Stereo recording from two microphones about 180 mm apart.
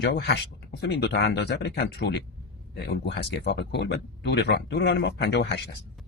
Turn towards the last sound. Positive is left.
turn(degrees=70)  # may be behind; listen again after turning